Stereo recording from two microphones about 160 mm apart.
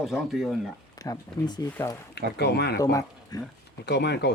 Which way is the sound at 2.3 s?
90° left.